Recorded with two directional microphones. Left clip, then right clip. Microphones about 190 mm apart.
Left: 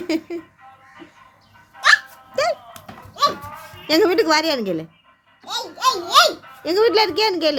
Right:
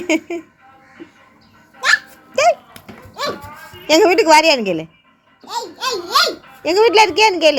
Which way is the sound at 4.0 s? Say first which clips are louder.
Right 6 dB; 10° right (ahead or behind).